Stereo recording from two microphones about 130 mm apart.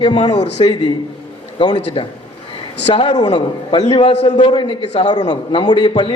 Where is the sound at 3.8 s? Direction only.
50° left (ahead or behind).